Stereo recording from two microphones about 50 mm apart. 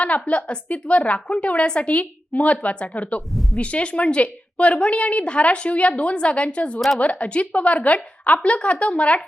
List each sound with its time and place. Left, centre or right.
0.0 s a woman's voice: left
3.2 s a woman's voice: centre
3.6 s a woman's voice: left